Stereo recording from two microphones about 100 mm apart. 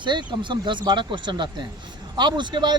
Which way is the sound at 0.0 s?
50° right (ahead or behind).